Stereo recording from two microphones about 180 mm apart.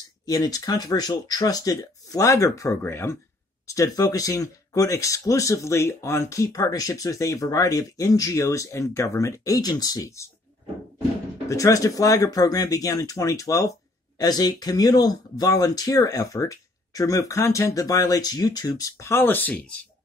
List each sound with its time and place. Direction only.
0.2 s speech: 20° left (ahead or behind)
11.4 s speech: 20° left (ahead or behind)